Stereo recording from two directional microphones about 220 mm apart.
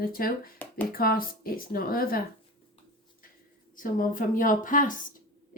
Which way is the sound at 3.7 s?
40° left (ahead or behind).